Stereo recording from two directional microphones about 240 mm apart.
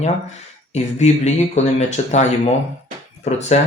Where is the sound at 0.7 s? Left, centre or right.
Left.